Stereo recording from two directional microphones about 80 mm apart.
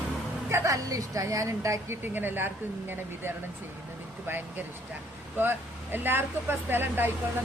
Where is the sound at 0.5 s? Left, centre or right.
Right.